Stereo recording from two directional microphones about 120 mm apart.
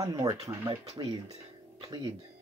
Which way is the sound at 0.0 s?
30° right (ahead or behind).